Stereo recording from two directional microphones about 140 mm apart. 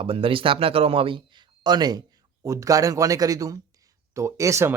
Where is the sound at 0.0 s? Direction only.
40° right (ahead or behind).